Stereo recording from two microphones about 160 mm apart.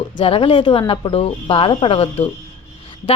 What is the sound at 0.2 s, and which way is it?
A woman's voice, 35° left (ahead or behind).